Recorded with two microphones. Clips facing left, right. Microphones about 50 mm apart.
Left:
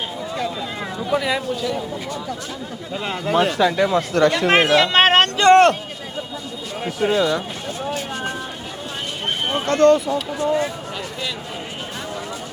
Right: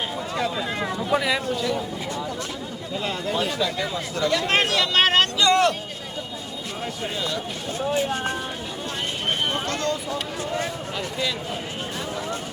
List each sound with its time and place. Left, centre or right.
0.3 s a sound: centre
1.5 s speech: centre
3.3 s speech: left
4.4 s speech: left
7.0 s speech: left
9.6 s speech: left